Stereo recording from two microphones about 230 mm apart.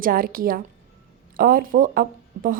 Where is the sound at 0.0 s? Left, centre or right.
Right.